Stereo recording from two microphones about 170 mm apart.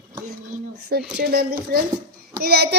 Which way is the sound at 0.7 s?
70° right (ahead or behind).